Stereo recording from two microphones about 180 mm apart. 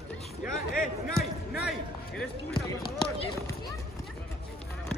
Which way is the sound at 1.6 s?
Centre (ahead or behind).